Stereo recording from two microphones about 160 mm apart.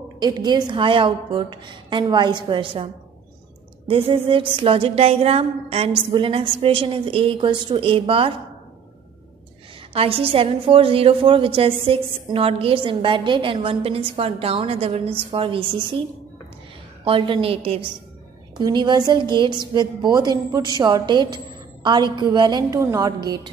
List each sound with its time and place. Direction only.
0.2 s a woman's voice: 25° right (ahead or behind)
9.9 s a woman's voice: 35° right (ahead or behind)
17.0 s a woman's voice: 35° right (ahead or behind)